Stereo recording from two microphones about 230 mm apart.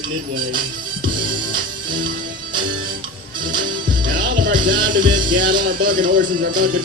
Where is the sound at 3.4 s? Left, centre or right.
Right.